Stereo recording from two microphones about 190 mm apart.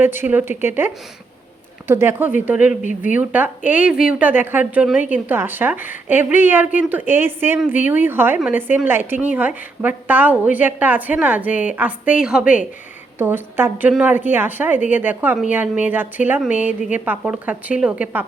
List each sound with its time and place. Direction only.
0.0 s a woman's voice: 10° right (ahead or behind)
2.8 s speech: 45° left (ahead or behind)
3.2 s a woman's voice: 10° right (ahead or behind)